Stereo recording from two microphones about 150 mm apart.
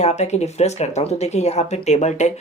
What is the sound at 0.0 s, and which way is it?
A woman's voice, 50° left (ahead or behind).